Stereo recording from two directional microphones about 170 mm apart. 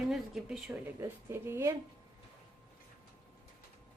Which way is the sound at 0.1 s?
5° right (ahead or behind).